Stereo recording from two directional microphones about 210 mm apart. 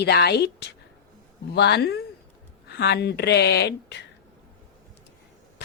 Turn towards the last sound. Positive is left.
turn(degrees=50)  # may be behind; listen again after turning